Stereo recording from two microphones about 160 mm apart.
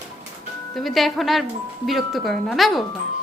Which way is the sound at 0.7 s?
Centre (ahead or behind).